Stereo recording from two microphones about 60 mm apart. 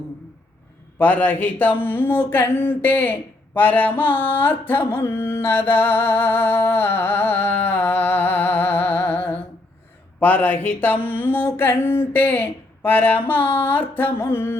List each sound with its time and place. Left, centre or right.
0.9 s speech: left